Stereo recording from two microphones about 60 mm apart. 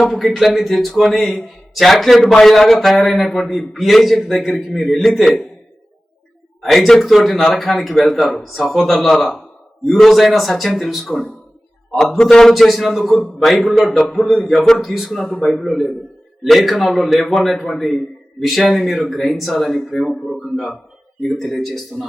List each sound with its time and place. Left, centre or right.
0.0 s a man's voice: centre
6.6 s a man's voice: centre
14.3 s a man's voice: centre